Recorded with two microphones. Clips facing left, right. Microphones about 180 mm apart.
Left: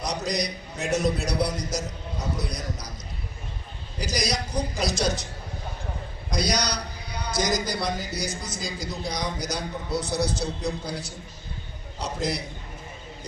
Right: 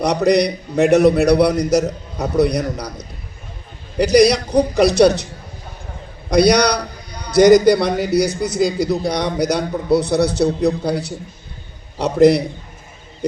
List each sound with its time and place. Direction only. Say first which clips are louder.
0.0 s a man's voice: right 14 dB; 65° right (ahead or behind)
3.9 s a man's voice: right 16 dB; 65° right (ahead or behind)
6.3 s a man's voice: right 14 dB; 65° right (ahead or behind)